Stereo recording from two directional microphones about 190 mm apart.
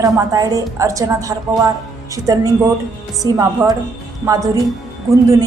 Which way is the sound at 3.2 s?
20° right (ahead or behind).